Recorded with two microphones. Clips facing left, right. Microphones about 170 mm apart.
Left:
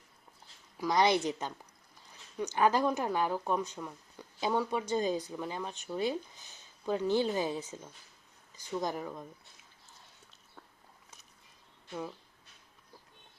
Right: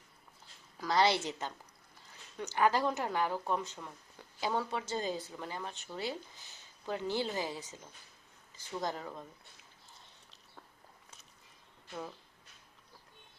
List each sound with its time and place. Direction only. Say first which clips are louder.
0.8 s a woman's voice: left 2 dB; 15° left (ahead or behind)